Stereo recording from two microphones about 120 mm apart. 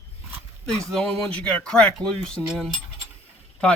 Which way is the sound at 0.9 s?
5° left (ahead or behind).